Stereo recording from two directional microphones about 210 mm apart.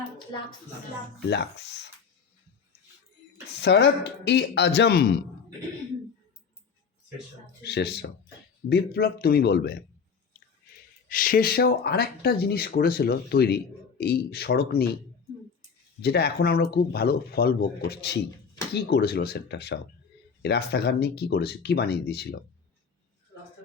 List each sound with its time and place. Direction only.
1.3 s speech: 55° left (ahead or behind)
3.6 s speech: 55° left (ahead or behind)
7.6 s speech: 50° left (ahead or behind)
11.1 s speech: 40° left (ahead or behind)
16.0 s speech: 50° left (ahead or behind)